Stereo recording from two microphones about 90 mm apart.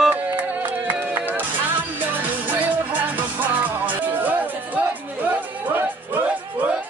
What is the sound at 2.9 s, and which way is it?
Music, 20° right (ahead or behind).